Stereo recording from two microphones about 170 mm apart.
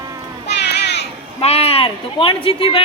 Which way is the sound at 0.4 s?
80° left.